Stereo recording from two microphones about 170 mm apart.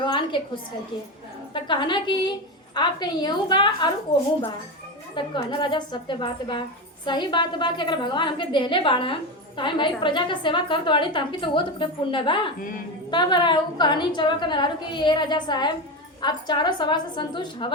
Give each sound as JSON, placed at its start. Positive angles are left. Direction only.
{"t": 0.0, "sound": "a woman's voice", "side_deg": 30}
{"t": 5.1, "sound": "a woman's voice", "side_deg": 30}